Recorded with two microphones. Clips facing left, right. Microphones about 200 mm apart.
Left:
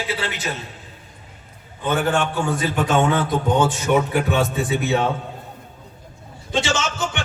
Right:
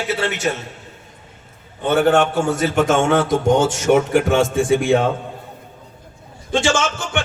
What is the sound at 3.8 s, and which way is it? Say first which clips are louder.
Music: right 4 dB; 45° right (ahead or behind).